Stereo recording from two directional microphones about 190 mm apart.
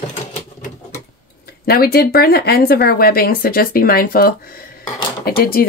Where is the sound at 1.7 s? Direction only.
55° left (ahead or behind).